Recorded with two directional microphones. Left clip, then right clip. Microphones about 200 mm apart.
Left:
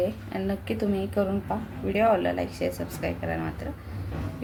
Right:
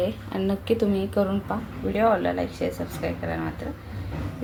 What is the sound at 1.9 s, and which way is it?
Speech, 5° left (ahead or behind).